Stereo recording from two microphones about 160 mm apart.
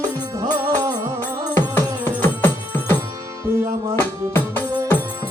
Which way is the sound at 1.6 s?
15° left (ahead or behind).